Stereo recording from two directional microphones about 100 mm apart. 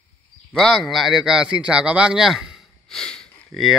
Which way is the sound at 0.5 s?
Centre (ahead or behind).